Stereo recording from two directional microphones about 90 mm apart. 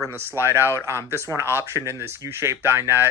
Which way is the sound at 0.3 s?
25° right (ahead or behind).